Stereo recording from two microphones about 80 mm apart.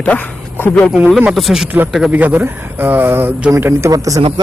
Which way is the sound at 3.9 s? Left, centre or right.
Right.